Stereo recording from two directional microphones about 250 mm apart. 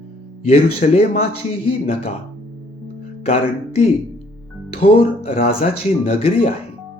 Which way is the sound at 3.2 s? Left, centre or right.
Left.